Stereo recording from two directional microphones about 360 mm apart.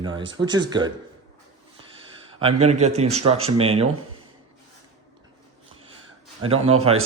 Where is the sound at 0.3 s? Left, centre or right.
Centre.